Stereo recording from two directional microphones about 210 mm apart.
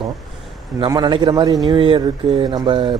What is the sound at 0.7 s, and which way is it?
A man's voice, 20° right (ahead or behind).